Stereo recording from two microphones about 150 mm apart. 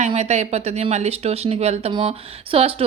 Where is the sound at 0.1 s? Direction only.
50° right (ahead or behind).